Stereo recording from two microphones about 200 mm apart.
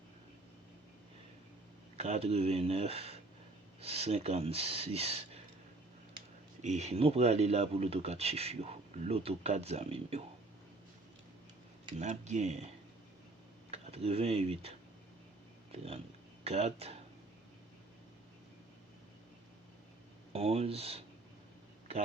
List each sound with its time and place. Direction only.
2.0 s speech: 30° right (ahead or behind)
6.6 s speech: 35° right (ahead or behind)
11.9 s speech: 35° right (ahead or behind)
13.7 s speech: 30° right (ahead or behind)
20.3 s speech: 30° right (ahead or behind)